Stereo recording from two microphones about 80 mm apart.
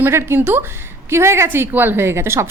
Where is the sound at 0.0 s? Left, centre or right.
Right.